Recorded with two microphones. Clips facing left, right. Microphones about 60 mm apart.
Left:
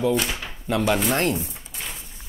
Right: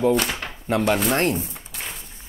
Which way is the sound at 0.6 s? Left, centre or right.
Right.